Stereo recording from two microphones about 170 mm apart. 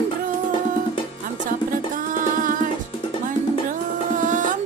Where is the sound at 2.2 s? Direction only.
50° right (ahead or behind).